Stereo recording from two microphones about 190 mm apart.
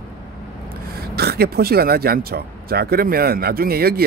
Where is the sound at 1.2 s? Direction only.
55° right (ahead or behind).